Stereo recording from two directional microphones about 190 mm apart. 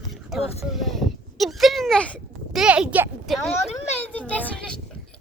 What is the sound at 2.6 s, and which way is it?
A woman's voice, 5° right (ahead or behind).